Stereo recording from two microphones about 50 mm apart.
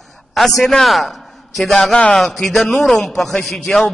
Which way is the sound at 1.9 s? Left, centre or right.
Centre.